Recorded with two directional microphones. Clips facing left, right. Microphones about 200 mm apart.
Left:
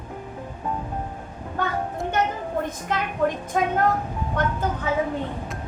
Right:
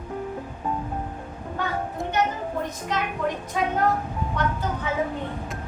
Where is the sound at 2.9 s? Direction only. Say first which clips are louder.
Left 3 dB; 50° left (ahead or behind).